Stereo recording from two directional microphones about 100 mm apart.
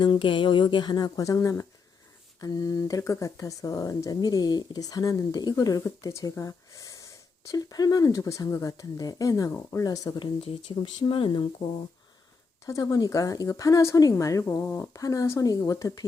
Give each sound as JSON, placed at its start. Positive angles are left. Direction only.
{"t": 0.0, "sound": "speech", "side_deg": 50}
{"t": 10.2, "sound": "speech", "side_deg": 60}
{"t": 12.6, "sound": "speech", "side_deg": 35}
{"t": 14.9, "sound": "speech", "side_deg": 35}